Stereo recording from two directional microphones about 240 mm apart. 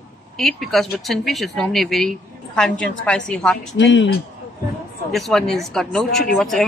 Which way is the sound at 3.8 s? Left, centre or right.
Left.